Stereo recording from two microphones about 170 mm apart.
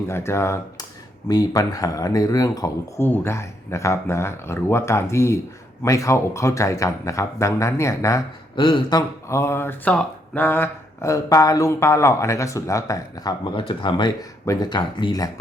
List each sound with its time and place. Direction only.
0.1 s speech: 15° left (ahead or behind)